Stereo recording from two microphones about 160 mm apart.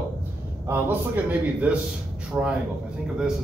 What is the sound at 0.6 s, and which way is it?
A man's voice, 10° right (ahead or behind).